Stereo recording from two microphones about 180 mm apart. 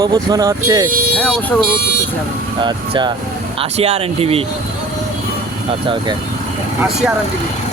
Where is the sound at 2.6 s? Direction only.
25° right (ahead or behind).